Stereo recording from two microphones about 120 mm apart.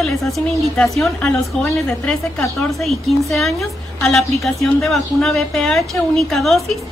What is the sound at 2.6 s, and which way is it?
A woman's voice, centre (ahead or behind).